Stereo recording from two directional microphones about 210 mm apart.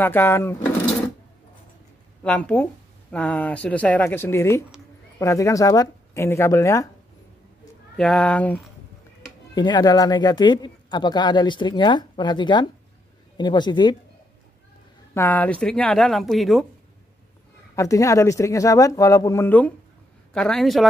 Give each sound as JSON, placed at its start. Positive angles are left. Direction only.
{"t": 0.0, "sound": "speech", "side_deg": 10}
{"t": 2.2, "sound": "speech", "side_deg": 5}
{"t": 8.0, "sound": "speech", "side_deg": 5}
{"t": 9.6, "sound": "speech", "side_deg": 20}
{"t": 15.1, "sound": "speech", "side_deg": 10}
{"t": 17.7, "sound": "speech", "side_deg": 15}